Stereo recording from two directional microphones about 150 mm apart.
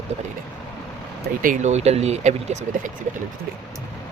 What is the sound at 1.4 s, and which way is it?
Speech, 65° right (ahead or behind).